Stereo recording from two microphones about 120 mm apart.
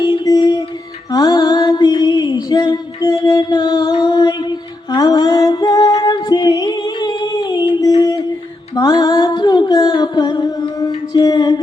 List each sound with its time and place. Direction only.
0.0 s mantra: 30° left (ahead or behind)
1.1 s music: 30° left (ahead or behind)
7.8 s a sound: 30° left (ahead or behind)
8.7 s music: 30° left (ahead or behind)